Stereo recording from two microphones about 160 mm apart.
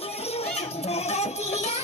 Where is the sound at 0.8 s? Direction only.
40° left (ahead or behind).